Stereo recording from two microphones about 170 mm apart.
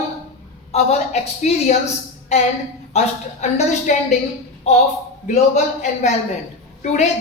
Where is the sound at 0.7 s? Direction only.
40° left (ahead or behind).